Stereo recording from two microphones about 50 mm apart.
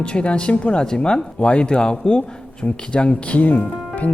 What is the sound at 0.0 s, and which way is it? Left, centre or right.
Speech, left.